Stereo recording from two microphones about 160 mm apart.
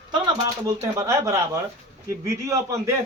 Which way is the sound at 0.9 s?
20° right (ahead or behind).